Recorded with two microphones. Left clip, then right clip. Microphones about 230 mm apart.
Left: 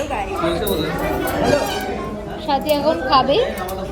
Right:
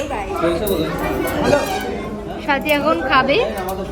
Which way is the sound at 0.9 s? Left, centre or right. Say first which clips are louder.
Even; centre.